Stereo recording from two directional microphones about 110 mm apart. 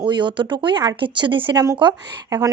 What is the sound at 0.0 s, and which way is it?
Speech, 45° right (ahead or behind).